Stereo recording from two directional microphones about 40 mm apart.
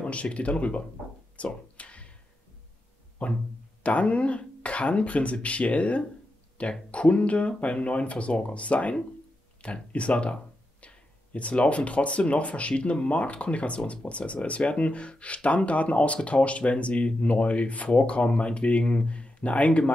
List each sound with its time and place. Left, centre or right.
0.0 s speech: left
1.3 s a sound: left
3.2 s speech: left